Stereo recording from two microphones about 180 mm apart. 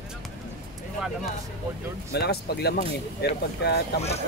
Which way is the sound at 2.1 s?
65° left (ahead or behind).